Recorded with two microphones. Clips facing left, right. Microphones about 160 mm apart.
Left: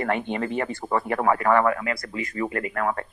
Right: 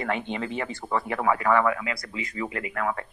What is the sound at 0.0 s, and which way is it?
Speech, 50° left (ahead or behind).